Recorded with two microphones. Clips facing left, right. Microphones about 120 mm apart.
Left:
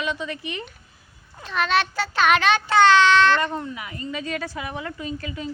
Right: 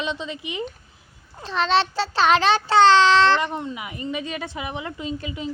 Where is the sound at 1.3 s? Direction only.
30° right (ahead or behind).